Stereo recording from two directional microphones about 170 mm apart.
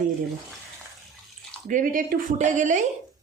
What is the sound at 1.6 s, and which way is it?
Speech, 50° right (ahead or behind).